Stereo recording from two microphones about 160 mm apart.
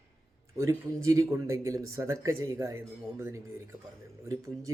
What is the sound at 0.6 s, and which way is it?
Speech, 20° right (ahead or behind).